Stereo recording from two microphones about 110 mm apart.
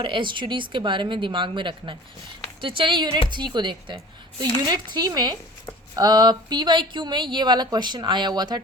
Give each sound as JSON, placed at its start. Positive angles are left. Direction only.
{"t": 0.0, "sound": "a woman's voice", "side_deg": -50}